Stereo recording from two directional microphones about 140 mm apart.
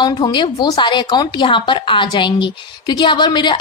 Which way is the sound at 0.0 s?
35° left (ahead or behind).